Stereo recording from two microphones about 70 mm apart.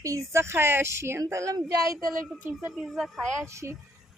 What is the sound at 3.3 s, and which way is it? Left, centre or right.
Speech, right.